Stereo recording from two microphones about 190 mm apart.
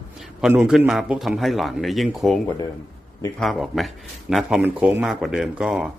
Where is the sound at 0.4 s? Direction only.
5° right (ahead or behind).